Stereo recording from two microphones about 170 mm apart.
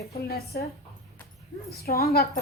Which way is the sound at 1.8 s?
65° left (ahead or behind).